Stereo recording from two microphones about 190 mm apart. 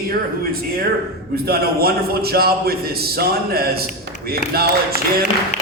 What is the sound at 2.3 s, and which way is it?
Speech, 55° right (ahead or behind).